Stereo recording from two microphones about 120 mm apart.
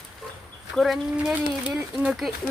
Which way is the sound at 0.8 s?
Centre (ahead or behind).